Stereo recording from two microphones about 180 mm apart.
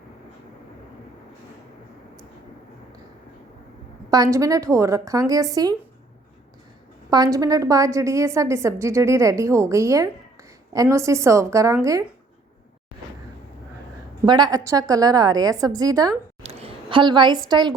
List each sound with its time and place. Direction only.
4.1 s a woman's voice: 20° right (ahead or behind)
7.1 s a woman's voice: 20° right (ahead or behind)
14.3 s a woman's voice: 25° right (ahead or behind)
16.4 s a sound: 35° right (ahead or behind)
17.5 s a woman's voice: 25° right (ahead or behind)